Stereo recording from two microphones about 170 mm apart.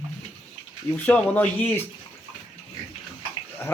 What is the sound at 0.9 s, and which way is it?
Speech, 10° left (ahead or behind).